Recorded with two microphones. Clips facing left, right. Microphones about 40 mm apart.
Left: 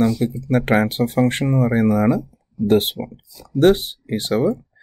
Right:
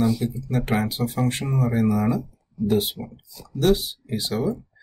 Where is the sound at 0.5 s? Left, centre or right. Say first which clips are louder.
Left 7 dB; left.